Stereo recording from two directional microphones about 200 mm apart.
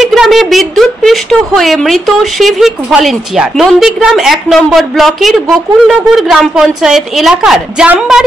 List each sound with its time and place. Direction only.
0.0 s a woman's voice: centre (ahead or behind)